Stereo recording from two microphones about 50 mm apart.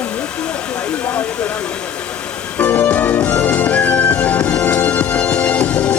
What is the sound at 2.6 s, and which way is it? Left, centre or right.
Music, left.